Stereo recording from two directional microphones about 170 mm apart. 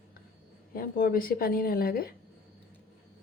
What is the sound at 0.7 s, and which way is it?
A woman's voice, 55° left (ahead or behind).